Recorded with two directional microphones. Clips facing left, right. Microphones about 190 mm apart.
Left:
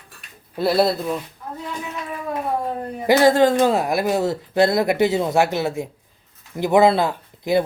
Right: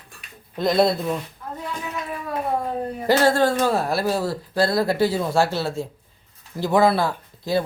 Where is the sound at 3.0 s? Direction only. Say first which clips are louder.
Left 4 dB; 15° left (ahead or behind).